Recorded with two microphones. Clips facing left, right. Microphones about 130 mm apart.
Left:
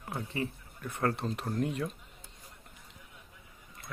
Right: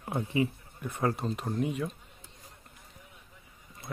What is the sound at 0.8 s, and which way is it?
Speech, 5° right (ahead or behind).